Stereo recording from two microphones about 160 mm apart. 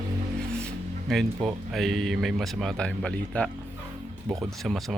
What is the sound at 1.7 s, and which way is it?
Speech, centre (ahead or behind).